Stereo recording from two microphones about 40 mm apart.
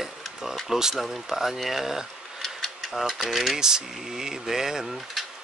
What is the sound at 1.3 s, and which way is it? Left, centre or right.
Speech, centre.